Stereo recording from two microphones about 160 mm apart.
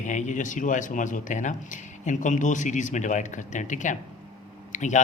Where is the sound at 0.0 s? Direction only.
50° left (ahead or behind).